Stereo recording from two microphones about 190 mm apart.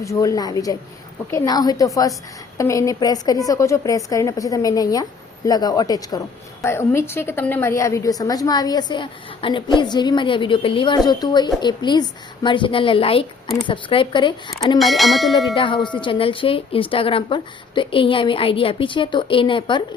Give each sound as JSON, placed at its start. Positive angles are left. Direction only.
{"t": 0.0, "sound": "a woman's voice", "side_deg": 15}
{"t": 14.8, "sound": "bell", "side_deg": 0}
{"t": 15.5, "sound": "a woman's voice", "side_deg": 25}